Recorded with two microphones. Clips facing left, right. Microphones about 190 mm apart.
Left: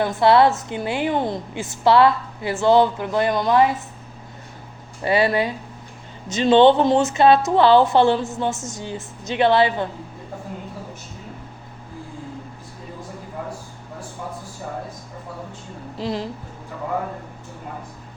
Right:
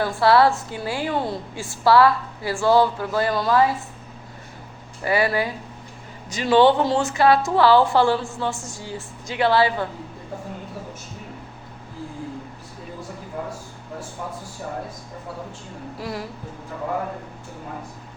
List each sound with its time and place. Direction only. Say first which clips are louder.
0.0 s a woman's voice: left 2 dB; 20° left (ahead or behind)
5.0 s a woman's voice: left 2 dB; 25° left (ahead or behind)
16.0 s a woman's voice: left 5 dB; 25° left (ahead or behind)